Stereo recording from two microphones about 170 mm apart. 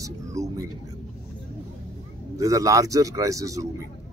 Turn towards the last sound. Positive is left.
turn(degrees=-20)  # may be behind; listen again after turning